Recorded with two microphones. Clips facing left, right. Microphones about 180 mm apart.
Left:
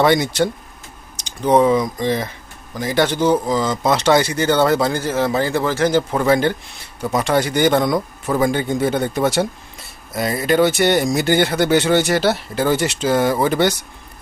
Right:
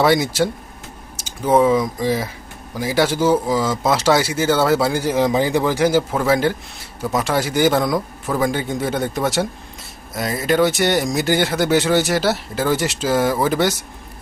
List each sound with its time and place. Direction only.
0.0 s speech: 5° right (ahead or behind)